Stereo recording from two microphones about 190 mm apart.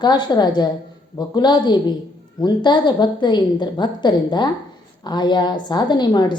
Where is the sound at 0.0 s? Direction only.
25° left (ahead or behind).